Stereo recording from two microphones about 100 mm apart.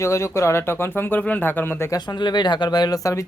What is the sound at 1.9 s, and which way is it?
Speech, 45° left (ahead or behind).